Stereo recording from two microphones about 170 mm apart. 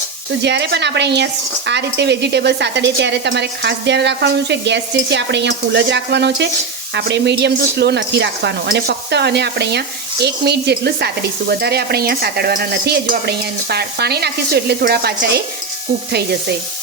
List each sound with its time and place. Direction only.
0.4 s speech: 85° right
7.4 s speech: 80° right